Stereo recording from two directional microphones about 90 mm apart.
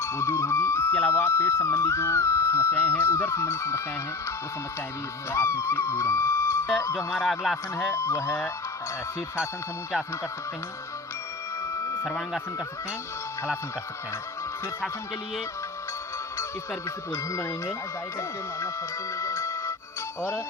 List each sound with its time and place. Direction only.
0.0 s speech: 30° left (ahead or behind)
5.3 s speech: 25° left (ahead or behind)
6.8 s music: 35° left (ahead or behind)
7.3 s speech: centre (ahead or behind)
7.9 s speech: 30° left (ahead or behind)
11.6 s music: 30° left (ahead or behind)
12.0 s speech: 5° left (ahead or behind)
17.1 s music: 30° left (ahead or behind)
19.1 s music: 30° left (ahead or behind)